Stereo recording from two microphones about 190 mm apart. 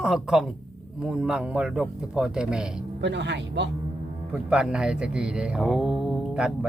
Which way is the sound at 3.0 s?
65° right (ahead or behind).